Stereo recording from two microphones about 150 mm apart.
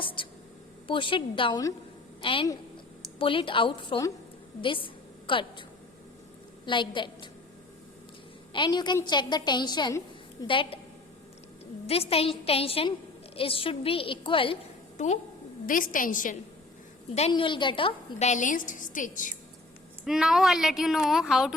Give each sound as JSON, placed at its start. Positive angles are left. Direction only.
{"t": 0.0, "sound": "a woman's voice", "side_deg": 35}
{"t": 6.7, "sound": "a woman's voice", "side_deg": 35}
{"t": 8.5, "sound": "a woman's voice", "side_deg": 30}
{"t": 11.9, "sound": "a woman's voice", "side_deg": 40}
{"t": 14.9, "sound": "a woman's voice", "side_deg": 50}
{"t": 15.6, "sound": "a woman's voice", "side_deg": 65}
{"t": 17.2, "sound": "a woman's voice", "side_deg": 40}
{"t": 18.2, "sound": "a woman's voice", "side_deg": 55}
{"t": 20.1, "sound": "speech", "side_deg": -5}